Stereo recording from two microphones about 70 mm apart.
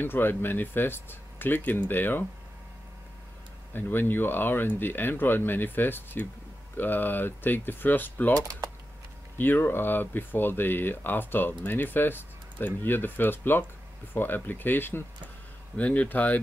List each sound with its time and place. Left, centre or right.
0.0 s speech: left
3.7 s speech: left
9.4 s speech: left